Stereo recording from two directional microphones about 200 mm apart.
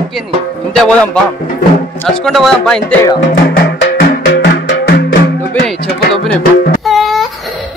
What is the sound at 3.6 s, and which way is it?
Music, 55° left (ahead or behind).